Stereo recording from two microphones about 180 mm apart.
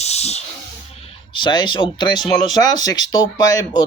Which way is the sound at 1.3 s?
25° left (ahead or behind).